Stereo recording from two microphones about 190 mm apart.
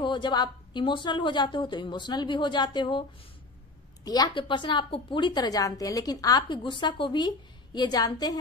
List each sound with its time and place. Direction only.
0.0 s a woman's voice: 25° left (ahead or behind)